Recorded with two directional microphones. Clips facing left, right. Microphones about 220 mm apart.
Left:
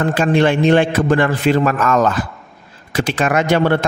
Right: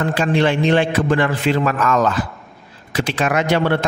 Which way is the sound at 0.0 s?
50° left (ahead or behind).